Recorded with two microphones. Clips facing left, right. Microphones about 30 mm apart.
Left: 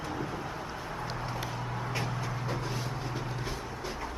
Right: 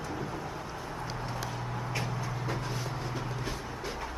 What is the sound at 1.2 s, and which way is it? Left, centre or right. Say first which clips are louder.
Vehicle: left 1 dB; centre.